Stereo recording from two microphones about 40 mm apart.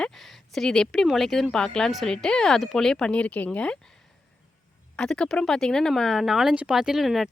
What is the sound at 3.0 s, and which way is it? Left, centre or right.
Speech, left.